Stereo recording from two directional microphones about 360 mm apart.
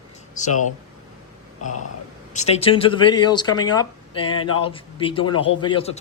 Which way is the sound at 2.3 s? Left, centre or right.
Centre.